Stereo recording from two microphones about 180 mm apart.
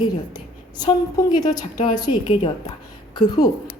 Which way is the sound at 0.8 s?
25° left (ahead or behind).